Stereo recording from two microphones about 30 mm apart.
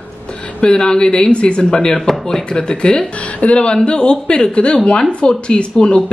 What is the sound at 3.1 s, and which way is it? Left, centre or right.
Speech, left.